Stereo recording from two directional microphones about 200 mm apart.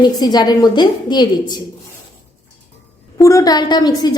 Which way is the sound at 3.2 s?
15° left (ahead or behind).